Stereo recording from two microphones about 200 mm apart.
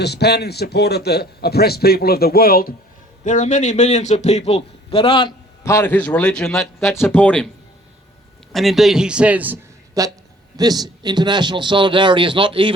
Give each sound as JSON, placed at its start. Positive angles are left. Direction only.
{"t": 0.0, "sound": "a man's voice", "side_deg": 55}
{"t": 6.8, "sound": "speech", "side_deg": 15}
{"t": 8.5, "sound": "a man's voice", "side_deg": 0}